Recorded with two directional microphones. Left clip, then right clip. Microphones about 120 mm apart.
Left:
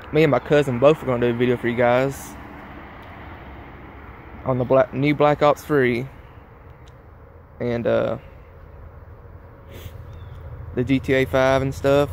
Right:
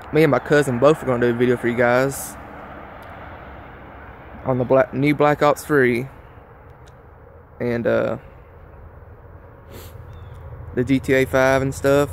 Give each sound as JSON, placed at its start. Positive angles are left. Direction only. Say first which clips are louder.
{"t": 0.0, "sound": "a sound", "louder": "right 1 dB", "side_deg": -25}
{"t": 4.4, "sound": "speech", "louder": "right 1 dB", "side_deg": -25}
{"t": 7.6, "sound": "speech", "louder": "right 1 dB", "side_deg": -30}
{"t": 10.7, "sound": "speech", "louder": "right 2 dB", "side_deg": -25}